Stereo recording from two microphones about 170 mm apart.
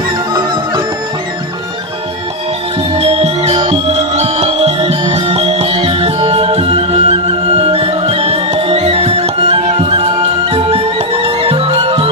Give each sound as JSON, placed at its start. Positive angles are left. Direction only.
{"t": 3.0, "sound": "music", "side_deg": -35}